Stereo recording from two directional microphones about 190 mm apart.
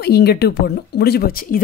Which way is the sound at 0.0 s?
55° left (ahead or behind).